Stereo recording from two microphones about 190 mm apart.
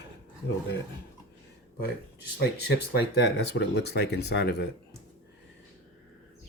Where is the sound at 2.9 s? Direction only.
60° left (ahead or behind).